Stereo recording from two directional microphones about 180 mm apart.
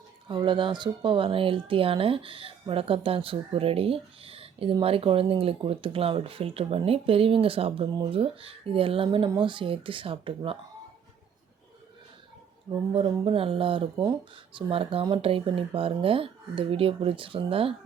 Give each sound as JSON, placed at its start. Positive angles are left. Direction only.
{"t": 0.3, "sound": "speech", "side_deg": -25}
{"t": 12.9, "sound": "speech", "side_deg": -30}